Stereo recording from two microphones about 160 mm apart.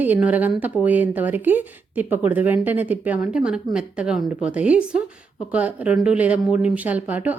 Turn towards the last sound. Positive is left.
turn(degrees=-10)  # may be behind; listen again after turning